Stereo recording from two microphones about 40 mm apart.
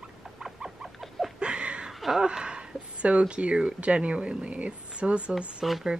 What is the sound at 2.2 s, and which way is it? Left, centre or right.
Speech, right.